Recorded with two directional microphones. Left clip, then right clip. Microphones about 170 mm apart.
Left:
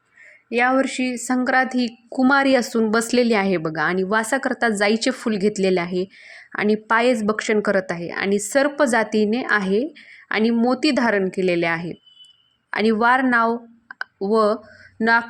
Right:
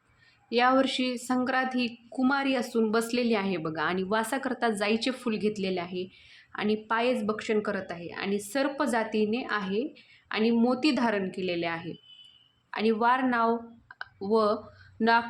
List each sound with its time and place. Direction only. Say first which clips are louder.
0.5 s a woman's voice: left 5 dB; 30° left (ahead or behind)